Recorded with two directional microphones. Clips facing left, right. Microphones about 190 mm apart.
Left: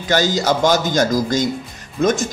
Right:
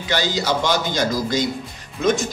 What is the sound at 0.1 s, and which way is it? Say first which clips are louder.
A man's voice: left 4 dB; 45° left (ahead or behind).